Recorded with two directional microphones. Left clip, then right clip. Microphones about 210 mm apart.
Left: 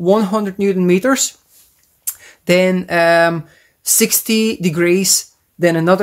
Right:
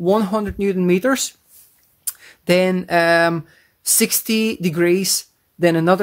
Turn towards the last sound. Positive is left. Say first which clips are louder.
# left 2 dB
turn(degrees=-25)  # may be behind; listen again after turning